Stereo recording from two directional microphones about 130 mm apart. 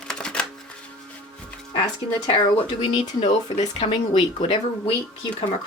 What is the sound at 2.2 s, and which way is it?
Speech, 45° left (ahead or behind).